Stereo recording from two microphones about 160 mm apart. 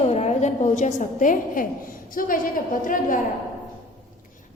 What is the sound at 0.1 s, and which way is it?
A woman's voice, 40° left (ahead or behind).